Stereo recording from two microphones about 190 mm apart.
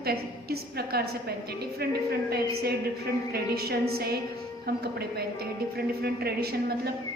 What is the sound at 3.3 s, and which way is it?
A woman's voice, 55° right (ahead or behind).